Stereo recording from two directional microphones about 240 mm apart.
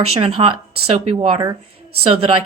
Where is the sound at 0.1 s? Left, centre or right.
Right.